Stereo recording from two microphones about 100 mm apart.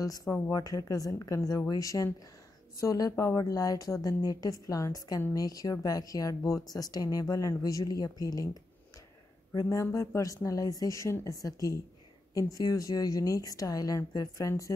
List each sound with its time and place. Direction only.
0.5 s speech: 40° left (ahead or behind)
9.5 s speech: 35° left (ahead or behind)